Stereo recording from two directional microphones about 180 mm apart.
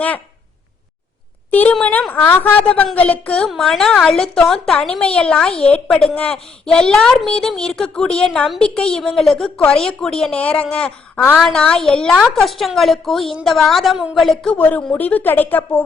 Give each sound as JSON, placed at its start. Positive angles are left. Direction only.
{"t": 1.5, "sound": "a woman's voice", "side_deg": 10}